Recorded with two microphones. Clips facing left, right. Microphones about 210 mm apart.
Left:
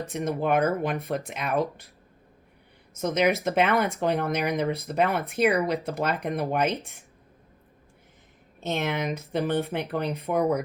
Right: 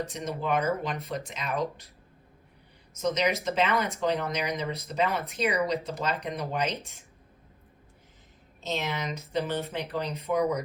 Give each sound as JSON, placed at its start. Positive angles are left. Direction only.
{"t": 0.0, "sound": "speech", "side_deg": 55}
{"t": 2.9, "sound": "speech", "side_deg": 55}
{"t": 8.6, "sound": "speech", "side_deg": 55}